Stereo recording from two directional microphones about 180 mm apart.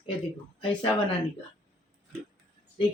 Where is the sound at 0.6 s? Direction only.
30° left (ahead or behind).